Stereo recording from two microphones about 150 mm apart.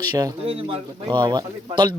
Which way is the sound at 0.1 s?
25° right (ahead or behind).